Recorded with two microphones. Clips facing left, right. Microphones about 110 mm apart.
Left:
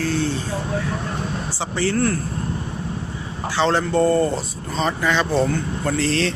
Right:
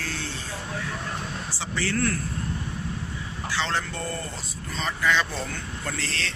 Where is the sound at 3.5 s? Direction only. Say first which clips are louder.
Left 11 dB; 30° left (ahead or behind).